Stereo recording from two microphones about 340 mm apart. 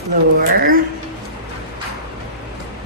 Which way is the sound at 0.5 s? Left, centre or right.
Right.